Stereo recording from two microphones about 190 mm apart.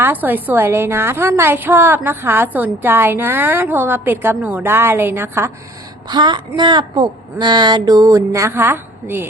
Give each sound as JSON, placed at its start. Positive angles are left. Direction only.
{"t": 0.0, "sound": "a woman's voice", "side_deg": -10}
{"t": 6.1, "sound": "a woman's voice", "side_deg": -25}